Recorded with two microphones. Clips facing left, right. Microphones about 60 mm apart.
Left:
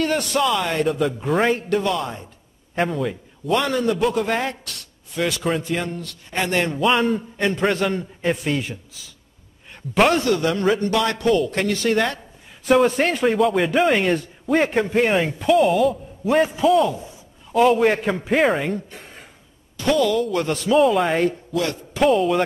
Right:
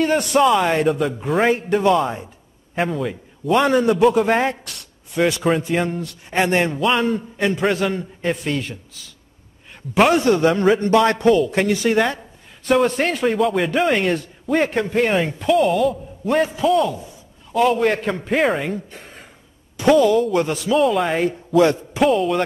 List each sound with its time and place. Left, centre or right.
0.2 s speech: right
0.8 s speech: centre
1.5 s a man's voice: centre
3.5 s speech: centre
3.9 s speech: centre
4.6 s a sound: centre
5.3 s speech: centre
6.8 s speech: centre
9.9 s speech: centre
10.2 s speech: right
11.2 s speech: centre
12.6 s speech: centre
20.0 s speech: centre